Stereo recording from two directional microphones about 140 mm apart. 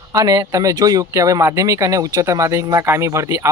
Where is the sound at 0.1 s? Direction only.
25° right (ahead or behind).